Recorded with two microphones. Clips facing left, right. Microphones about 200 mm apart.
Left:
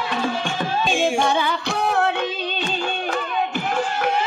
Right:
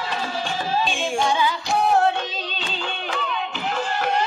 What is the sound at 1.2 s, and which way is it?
Music, 60° left (ahead or behind).